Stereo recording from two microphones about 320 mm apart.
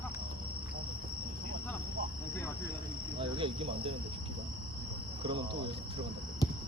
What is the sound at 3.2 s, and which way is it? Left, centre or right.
Cricket, centre.